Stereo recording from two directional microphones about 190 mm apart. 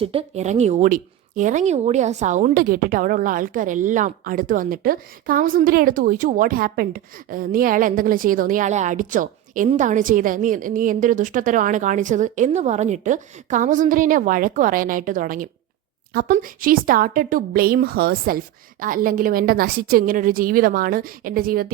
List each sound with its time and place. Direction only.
0.0 s speech: 30° right (ahead or behind); by 21.7 s 50° right (ahead or behind)